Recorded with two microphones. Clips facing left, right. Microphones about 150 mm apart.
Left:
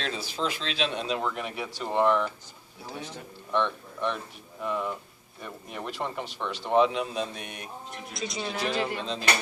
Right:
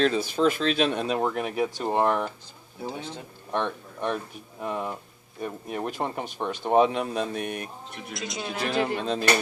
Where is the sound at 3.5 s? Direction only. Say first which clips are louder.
Left 1 dB; 50° right (ahead or behind).